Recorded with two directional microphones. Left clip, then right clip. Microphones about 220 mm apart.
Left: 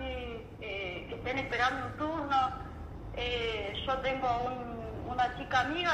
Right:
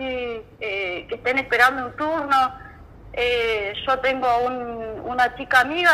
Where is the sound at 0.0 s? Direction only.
35° right (ahead or behind).